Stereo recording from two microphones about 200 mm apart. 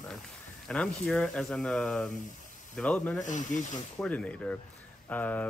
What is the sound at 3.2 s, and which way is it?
Speech, 40° left (ahead or behind).